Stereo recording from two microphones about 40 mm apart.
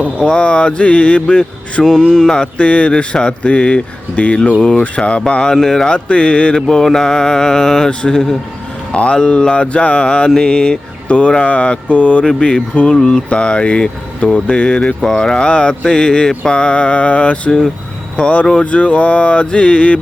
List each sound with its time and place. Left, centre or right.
0.2 s mantra: left
1.8 s mantra: centre
5.5 s mantra: centre
5.9 s mantra: left
6.7 s mantra: centre
8.9 s mantra: left
11.4 s a sound: left
12.7 s mantra: left
15.0 s mantra: centre
16.4 s a sound: left